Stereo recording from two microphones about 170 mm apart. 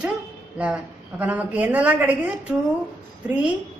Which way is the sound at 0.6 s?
10° right (ahead or behind).